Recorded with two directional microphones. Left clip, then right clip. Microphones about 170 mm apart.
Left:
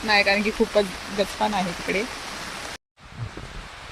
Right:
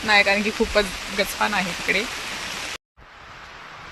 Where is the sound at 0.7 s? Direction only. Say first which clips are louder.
Right 1 dB; 30° left (ahead or behind).